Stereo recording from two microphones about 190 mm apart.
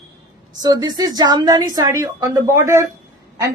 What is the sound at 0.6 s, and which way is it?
A woman's voice, 20° right (ahead or behind).